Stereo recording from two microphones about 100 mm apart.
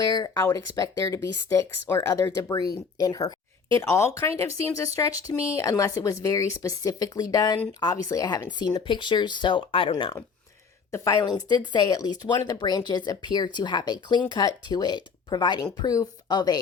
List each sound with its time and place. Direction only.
0.0 s speech: 45° left (ahead or behind)
0.3 s speech: 30° left (ahead or behind); by 9.9 s 60° left (ahead or behind)
11.2 s speech: 45° left (ahead or behind)